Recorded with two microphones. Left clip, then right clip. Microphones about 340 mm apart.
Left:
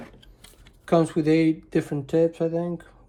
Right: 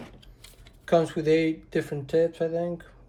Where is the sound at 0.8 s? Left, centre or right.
Centre.